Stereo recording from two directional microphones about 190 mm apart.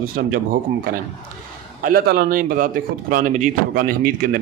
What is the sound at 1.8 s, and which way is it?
Speech, 55° right (ahead or behind).